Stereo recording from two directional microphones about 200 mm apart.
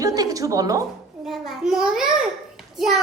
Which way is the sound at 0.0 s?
15° right (ahead or behind).